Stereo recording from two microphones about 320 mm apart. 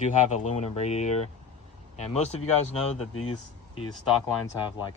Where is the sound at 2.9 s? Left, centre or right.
Left.